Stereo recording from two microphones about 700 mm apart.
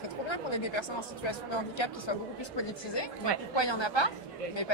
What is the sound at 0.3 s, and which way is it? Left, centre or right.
Speech, left.